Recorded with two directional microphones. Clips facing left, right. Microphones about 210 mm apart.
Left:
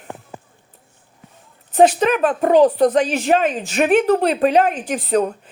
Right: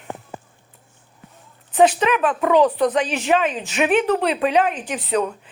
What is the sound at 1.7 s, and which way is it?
A man's voice, 40° left (ahead or behind).